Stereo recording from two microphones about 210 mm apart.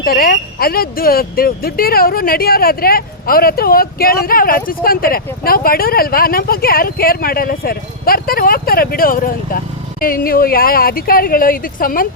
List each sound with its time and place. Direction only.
0.0 s speech: 45° left (ahead or behind)